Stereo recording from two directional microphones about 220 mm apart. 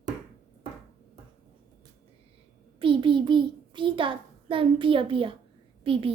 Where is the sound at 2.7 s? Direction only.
25° right (ahead or behind).